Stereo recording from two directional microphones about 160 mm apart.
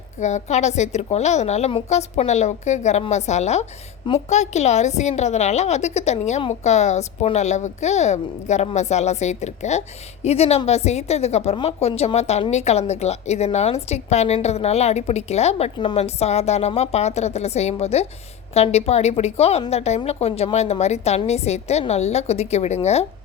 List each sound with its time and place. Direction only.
0.2 s a woman's voice: 45° left (ahead or behind)